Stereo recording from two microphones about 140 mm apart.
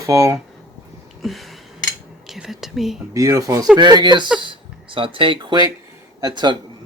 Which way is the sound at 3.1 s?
25° right (ahead or behind).